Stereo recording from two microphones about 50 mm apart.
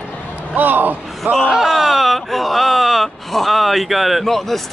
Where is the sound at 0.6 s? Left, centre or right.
Right.